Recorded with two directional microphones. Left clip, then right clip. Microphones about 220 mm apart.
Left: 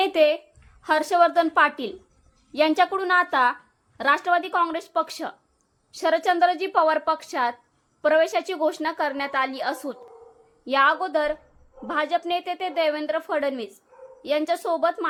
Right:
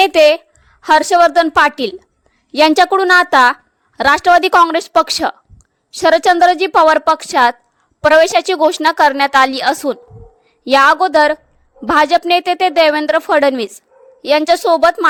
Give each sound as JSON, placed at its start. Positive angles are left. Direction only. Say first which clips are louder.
{"t": 0.0, "sound": "a woman's voice", "louder": "right 11 dB", "side_deg": -40}